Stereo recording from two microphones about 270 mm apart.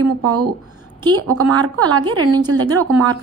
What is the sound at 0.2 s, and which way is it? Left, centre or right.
A woman's voice, right.